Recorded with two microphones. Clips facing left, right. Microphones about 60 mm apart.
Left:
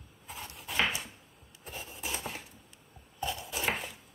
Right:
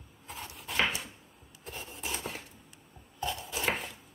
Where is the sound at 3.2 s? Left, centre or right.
Centre.